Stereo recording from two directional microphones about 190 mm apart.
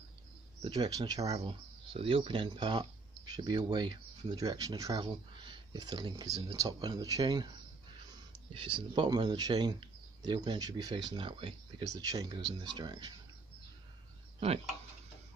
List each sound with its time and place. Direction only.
0.7 s speech: 20° right (ahead or behind)
8.5 s speech: 25° right (ahead or behind)